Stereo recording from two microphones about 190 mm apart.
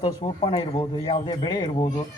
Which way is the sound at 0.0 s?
25° left (ahead or behind).